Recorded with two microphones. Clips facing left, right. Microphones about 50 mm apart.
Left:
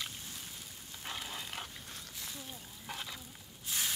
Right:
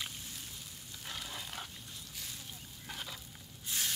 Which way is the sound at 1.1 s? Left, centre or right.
Centre.